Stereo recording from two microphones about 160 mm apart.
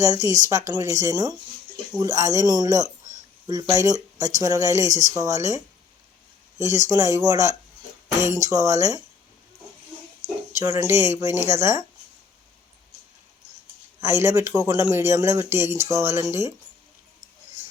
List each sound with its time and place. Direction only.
0.0 s speech: 20° right (ahead or behind)
10.2 s speech: 15° right (ahead or behind)
14.0 s speech: 15° right (ahead or behind)